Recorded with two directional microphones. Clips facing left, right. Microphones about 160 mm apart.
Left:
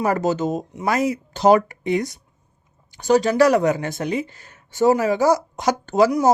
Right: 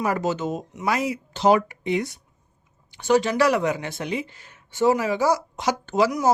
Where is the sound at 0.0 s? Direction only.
40° left (ahead or behind).